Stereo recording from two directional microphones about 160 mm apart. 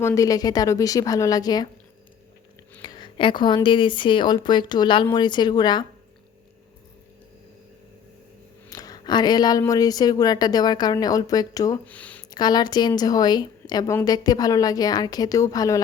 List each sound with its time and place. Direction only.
0.0 s speech: 20° left (ahead or behind)
2.8 s speech: 30° left (ahead or behind)
8.7 s speech: 25° left (ahead or behind)
11.9 s speech: 10° left (ahead or behind)
12.3 s speech: 25° left (ahead or behind)